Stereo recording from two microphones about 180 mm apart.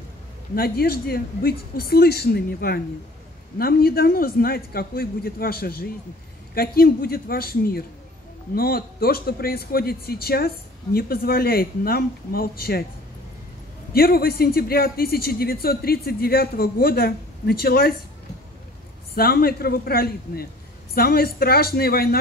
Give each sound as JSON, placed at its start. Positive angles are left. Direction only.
{"t": 0.6, "sound": "speech", "side_deg": 55}
{"t": 13.9, "sound": "speech", "side_deg": 55}
{"t": 19.1, "sound": "speech", "side_deg": 60}